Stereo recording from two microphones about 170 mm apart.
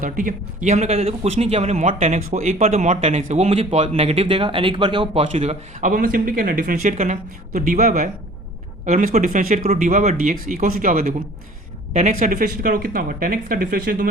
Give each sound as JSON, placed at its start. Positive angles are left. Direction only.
{"t": 0.0, "sound": "speech", "side_deg": -50}
{"t": 6.9, "sound": "speech", "side_deg": -45}